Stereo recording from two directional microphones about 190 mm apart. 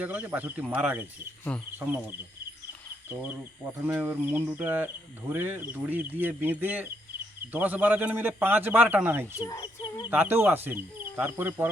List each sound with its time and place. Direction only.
0.0 s speech: 10° right (ahead or behind)
1.5 s insect: 5° left (ahead or behind)
3.7 s speech: 10° right (ahead or behind)
9.4 s speech: 20° left (ahead or behind)
10.1 s speech: 10° right (ahead or behind)